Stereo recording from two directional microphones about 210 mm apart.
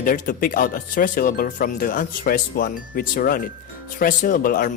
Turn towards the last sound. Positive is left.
turn(degrees=40)  # may be behind; listen again after turning